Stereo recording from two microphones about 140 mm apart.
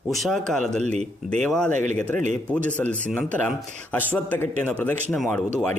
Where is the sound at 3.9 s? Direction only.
15° left (ahead or behind).